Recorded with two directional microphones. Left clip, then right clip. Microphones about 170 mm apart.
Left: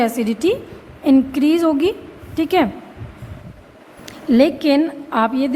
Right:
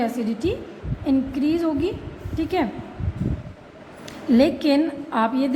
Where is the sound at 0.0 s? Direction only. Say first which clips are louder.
Left 7 dB; 45° left (ahead or behind).